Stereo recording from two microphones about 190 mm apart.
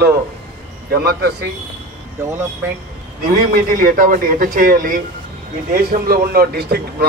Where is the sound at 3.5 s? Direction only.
50° right (ahead or behind).